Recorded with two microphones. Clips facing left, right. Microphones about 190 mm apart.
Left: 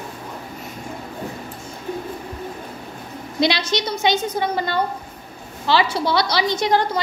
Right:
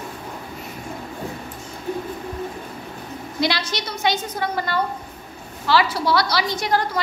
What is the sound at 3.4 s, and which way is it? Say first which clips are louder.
A woman's voice: left 4 dB; 20° left (ahead or behind).